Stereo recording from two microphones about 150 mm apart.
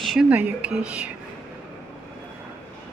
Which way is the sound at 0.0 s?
Centre (ahead or behind).